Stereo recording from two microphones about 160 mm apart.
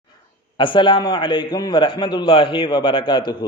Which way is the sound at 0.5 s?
30° left (ahead or behind).